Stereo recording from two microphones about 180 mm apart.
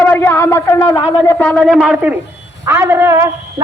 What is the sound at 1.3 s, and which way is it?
A man's voice, 5° left (ahead or behind).